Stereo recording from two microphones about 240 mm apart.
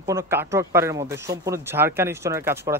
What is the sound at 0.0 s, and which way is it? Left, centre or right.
Speech, centre.